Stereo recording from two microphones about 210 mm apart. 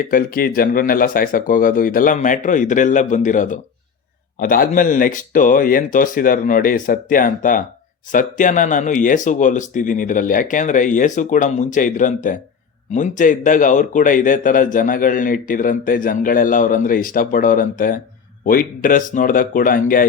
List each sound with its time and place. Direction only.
0.0 s a man's voice: 40° left (ahead or behind)